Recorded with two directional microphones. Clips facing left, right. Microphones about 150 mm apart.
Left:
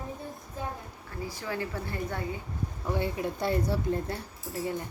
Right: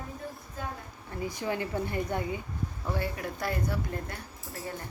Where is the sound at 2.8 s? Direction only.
20° left (ahead or behind).